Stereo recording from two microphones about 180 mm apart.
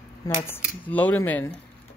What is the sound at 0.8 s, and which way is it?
Speech, 10° left (ahead or behind).